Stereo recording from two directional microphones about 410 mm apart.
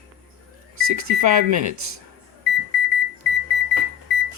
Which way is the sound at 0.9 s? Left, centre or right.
Right.